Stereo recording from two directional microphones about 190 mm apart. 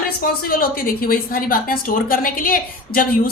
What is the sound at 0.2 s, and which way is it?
A woman's voice, 50° left (ahead or behind).